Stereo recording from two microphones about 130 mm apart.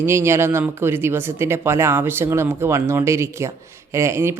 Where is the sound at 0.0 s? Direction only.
20° right (ahead or behind).